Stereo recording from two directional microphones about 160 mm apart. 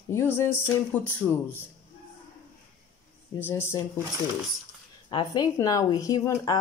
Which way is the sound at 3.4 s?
15° left (ahead or behind).